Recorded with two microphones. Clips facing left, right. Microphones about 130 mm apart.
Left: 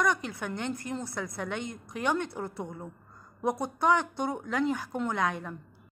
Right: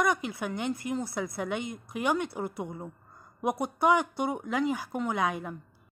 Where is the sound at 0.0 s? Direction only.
10° right (ahead or behind).